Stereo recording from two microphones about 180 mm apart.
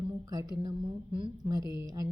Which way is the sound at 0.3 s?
20° right (ahead or behind).